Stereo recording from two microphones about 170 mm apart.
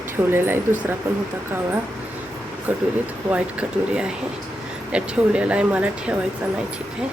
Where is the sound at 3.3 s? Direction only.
5° right (ahead or behind).